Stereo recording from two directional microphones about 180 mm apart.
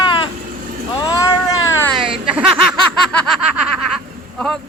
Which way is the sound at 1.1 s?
20° left (ahead or behind).